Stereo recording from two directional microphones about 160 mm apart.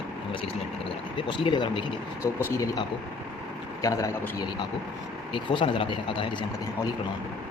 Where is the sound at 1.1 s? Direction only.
30° left (ahead or behind).